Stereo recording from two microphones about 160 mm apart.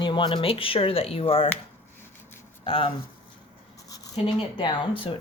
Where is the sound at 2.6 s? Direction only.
35° left (ahead or behind).